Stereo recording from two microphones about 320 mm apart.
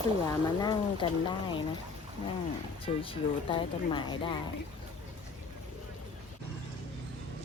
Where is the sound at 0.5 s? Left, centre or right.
Centre.